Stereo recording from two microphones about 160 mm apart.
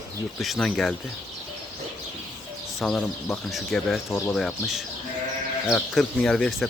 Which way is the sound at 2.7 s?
5° left (ahead or behind).